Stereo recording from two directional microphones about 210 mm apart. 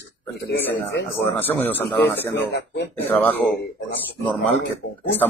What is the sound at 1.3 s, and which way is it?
A man's voice, 10° left (ahead or behind).